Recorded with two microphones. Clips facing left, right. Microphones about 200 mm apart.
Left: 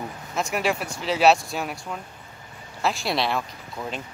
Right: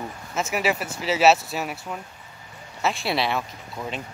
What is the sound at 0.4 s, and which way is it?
Speech, 5° right (ahead or behind).